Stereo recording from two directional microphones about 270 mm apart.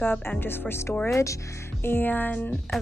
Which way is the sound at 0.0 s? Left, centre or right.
Centre.